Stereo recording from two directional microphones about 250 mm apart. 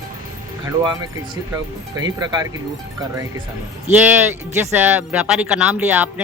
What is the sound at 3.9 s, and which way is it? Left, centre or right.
Speech, centre.